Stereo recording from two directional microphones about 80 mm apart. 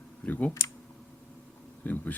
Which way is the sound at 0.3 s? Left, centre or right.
Centre.